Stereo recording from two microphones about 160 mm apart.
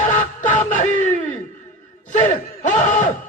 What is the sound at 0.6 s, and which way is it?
Speech, 50° left (ahead or behind).